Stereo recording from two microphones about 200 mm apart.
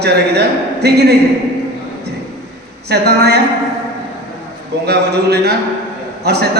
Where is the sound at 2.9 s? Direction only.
55° right (ahead or behind).